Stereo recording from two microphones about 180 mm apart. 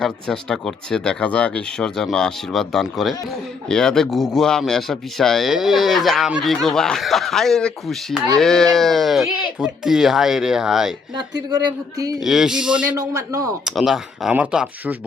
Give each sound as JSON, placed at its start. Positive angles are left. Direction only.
{"t": 0.0, "sound": "speech", "side_deg": 5}
{"t": 11.1, "sound": "speech", "side_deg": -25}
{"t": 12.2, "sound": "speech", "side_deg": 0}
{"t": 13.0, "sound": "speech", "side_deg": -20}
{"t": 13.7, "sound": "speech", "side_deg": 0}